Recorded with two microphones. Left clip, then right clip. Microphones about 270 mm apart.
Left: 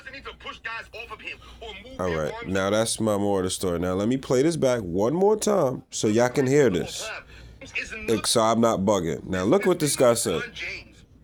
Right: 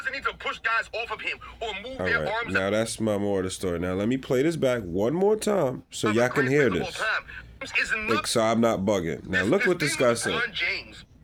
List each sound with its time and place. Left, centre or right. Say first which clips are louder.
0.0 s speech: right 9 dB; right
2.6 s speech: left 5 dB; centre
7.7 s speech: right 6 dB; right
8.2 s speech: left 5 dB; centre
10.3 s speech: right 4 dB; right